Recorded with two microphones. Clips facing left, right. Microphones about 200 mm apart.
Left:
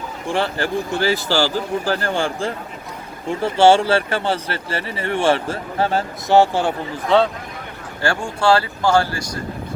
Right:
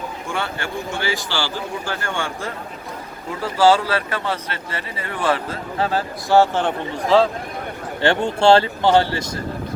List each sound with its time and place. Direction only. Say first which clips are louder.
0.3 s speech: left 7 dB; 30° left (ahead or behind); by 7.3 s centre (ahead or behind)
8.0 s speech: right 3 dB; 20° right (ahead or behind)